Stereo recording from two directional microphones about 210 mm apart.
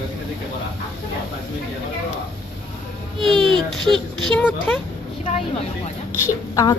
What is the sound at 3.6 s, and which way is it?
Speech, 20° right (ahead or behind).